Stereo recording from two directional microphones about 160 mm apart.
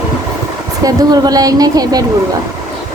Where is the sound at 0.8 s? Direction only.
25° right (ahead or behind).